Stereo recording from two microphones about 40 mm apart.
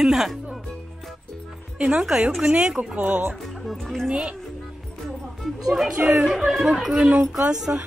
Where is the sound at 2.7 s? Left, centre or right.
Right.